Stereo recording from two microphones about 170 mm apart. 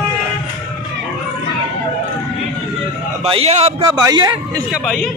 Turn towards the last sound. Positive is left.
turn(degrees=0)  # may be behind; listen again after turning